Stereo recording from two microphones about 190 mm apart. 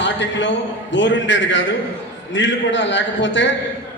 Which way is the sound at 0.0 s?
70° left (ahead or behind).